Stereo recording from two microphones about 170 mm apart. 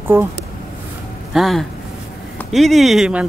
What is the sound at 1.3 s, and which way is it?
Speech, centre (ahead or behind).